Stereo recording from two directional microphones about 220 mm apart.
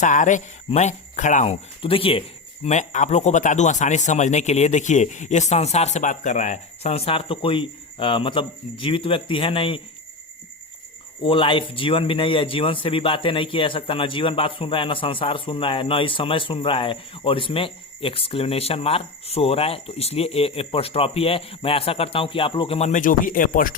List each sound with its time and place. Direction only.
0.0 s speech: 35° left (ahead or behind)
11.2 s a man's voice: 25° left (ahead or behind); by 23.7 s 40° left (ahead or behind)